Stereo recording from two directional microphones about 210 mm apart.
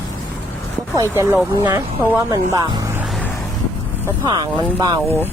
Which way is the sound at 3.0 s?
5° left (ahead or behind).